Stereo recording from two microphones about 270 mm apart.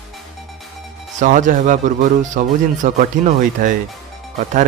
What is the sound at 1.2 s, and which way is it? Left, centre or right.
Speech, right.